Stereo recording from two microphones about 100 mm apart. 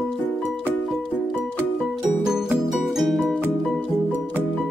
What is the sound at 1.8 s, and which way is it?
Music, centre (ahead or behind).